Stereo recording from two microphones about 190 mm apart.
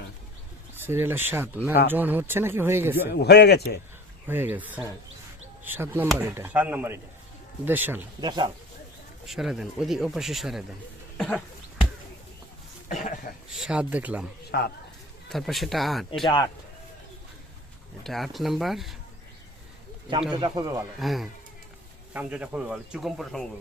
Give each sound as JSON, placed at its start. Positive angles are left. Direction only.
{"t": 0.8, "sound": "speech", "side_deg": -10}
{"t": 3.1, "sound": "a man's voice", "side_deg": 60}
{"t": 4.3, "sound": "speech", "side_deg": -10}
{"t": 8.2, "sound": "speech", "side_deg": -25}
{"t": 9.2, "sound": "speech", "side_deg": 0}
{"t": 12.9, "sound": "speech", "side_deg": 40}
{"t": 13.5, "sound": "speech", "side_deg": -5}
{"t": 14.5, "sound": "a man's voice", "side_deg": 60}
{"t": 15.3, "sound": "speech", "side_deg": 0}
{"t": 16.2, "sound": "speech", "side_deg": 25}
{"t": 18.0, "sound": "speech", "side_deg": 0}
{"t": 20.3, "sound": "speech", "side_deg": -20}
{"t": 21.0, "sound": "speech", "side_deg": 0}